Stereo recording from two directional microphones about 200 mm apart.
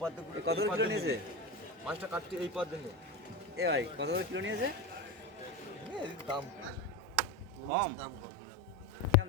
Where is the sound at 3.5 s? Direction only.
60° right (ahead or behind).